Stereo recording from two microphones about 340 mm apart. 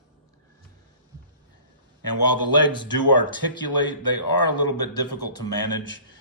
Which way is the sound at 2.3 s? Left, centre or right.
Centre.